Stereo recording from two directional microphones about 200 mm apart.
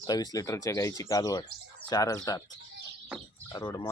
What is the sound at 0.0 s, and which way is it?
Speech, 20° left (ahead or behind).